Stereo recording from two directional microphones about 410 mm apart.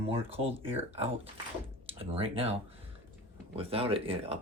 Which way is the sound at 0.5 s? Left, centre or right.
Centre.